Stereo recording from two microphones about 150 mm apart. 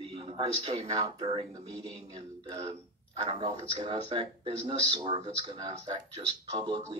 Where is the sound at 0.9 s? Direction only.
25° right (ahead or behind).